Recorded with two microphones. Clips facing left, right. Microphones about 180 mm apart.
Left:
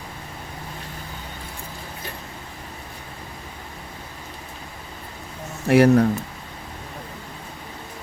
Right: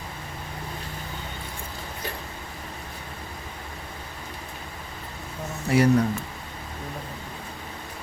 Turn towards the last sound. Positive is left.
turn(degrees=65)  # may be behind; listen again after turning